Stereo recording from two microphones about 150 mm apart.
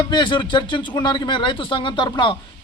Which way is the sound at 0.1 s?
30° left (ahead or behind).